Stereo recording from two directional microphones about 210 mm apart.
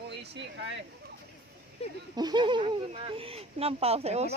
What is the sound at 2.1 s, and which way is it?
Speech, 20° right (ahead or behind).